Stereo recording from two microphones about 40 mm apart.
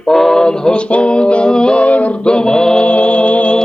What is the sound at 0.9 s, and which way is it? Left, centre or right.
Music, left.